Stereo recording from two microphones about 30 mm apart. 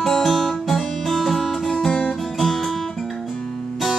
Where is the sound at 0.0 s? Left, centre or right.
Centre.